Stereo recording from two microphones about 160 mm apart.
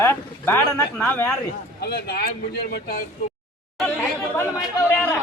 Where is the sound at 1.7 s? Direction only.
85° left; by 3.0 s 70° left (ahead or behind).